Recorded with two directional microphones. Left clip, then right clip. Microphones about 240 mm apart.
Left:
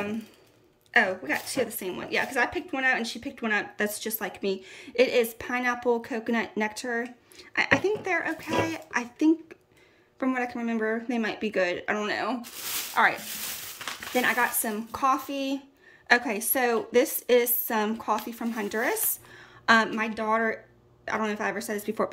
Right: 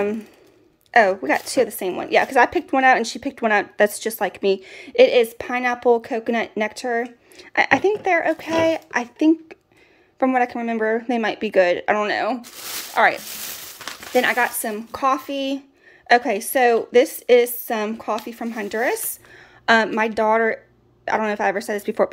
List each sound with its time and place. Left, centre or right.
0.9 s a woman's voice: centre
14.1 s a woman's voice: centre